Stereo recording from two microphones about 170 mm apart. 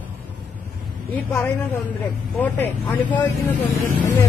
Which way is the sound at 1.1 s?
10° left (ahead or behind).